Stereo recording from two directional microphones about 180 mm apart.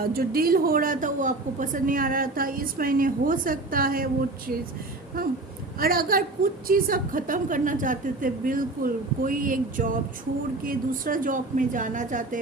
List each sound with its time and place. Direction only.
0.1 s a woman's voice: 55° right (ahead or behind)